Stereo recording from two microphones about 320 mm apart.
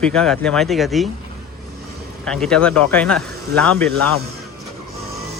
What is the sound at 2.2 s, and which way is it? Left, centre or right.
Speech, centre.